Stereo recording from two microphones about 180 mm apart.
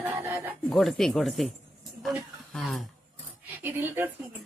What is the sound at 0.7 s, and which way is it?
Speech, centre (ahead or behind).